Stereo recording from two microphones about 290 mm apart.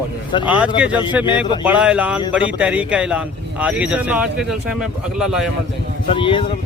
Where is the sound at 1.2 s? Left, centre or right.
Centre.